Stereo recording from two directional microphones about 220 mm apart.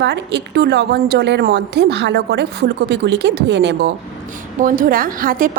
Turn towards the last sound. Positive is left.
turn(degrees=-40)  # may be behind; listen again after turning